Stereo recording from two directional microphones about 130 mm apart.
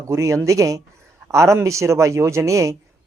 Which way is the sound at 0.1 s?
25° right (ahead or behind).